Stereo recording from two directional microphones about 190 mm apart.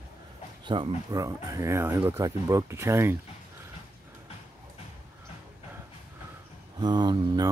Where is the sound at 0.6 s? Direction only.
25° right (ahead or behind).